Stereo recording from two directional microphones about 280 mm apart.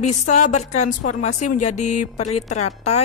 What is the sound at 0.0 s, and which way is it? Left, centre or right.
A woman's voice, left.